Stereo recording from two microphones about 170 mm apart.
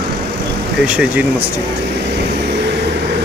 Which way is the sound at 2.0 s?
80° right.